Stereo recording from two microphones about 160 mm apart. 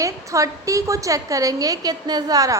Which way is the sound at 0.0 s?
20° right (ahead or behind).